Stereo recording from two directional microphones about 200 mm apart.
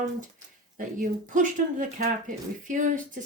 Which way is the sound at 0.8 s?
40° right (ahead or behind).